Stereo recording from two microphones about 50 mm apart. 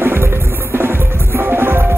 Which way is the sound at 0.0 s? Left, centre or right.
Right.